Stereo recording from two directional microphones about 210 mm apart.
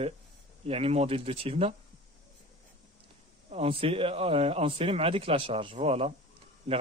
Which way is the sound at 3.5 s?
25° right (ahead or behind).